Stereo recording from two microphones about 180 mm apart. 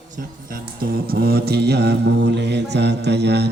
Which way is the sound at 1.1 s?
60° right (ahead or behind).